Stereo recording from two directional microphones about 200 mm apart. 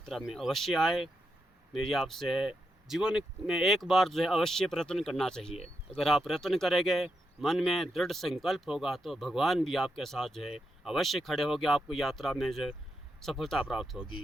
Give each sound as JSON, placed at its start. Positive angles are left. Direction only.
{"t": 0.0, "sound": "speech", "side_deg": 0}
{"t": 5.5, "sound": "speech", "side_deg": 30}
{"t": 6.0, "sound": "speech", "side_deg": 0}